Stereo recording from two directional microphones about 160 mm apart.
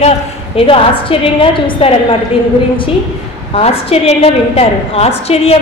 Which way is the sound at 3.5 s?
40° left (ahead or behind).